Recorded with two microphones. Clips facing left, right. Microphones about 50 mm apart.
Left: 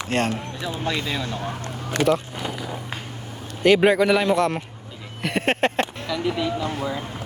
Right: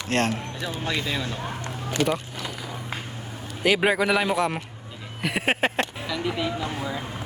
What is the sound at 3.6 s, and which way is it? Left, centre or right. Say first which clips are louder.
Speech: left 5 dB; centre.